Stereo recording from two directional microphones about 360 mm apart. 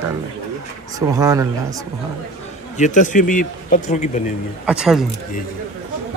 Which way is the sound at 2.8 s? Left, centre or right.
Centre.